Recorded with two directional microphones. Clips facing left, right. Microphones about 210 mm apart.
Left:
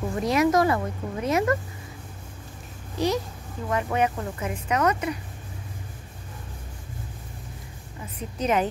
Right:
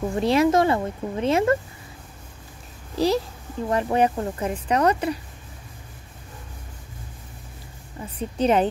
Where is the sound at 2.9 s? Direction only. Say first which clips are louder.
Right 4 dB; 35° right (ahead or behind).